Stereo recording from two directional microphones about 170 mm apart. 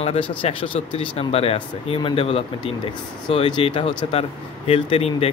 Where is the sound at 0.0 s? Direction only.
35° left (ahead or behind).